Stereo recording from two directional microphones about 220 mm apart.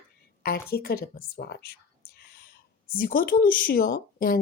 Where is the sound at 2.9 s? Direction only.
40° left (ahead or behind).